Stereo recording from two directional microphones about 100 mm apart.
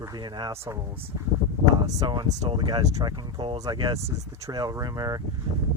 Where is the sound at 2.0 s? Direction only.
45° right (ahead or behind).